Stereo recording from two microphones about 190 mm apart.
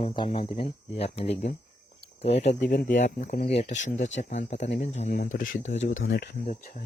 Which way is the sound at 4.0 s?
75° left (ahead or behind).